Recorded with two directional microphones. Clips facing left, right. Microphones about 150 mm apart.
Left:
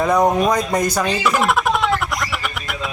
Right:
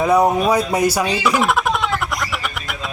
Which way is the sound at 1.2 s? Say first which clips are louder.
Even; centre (ahead or behind).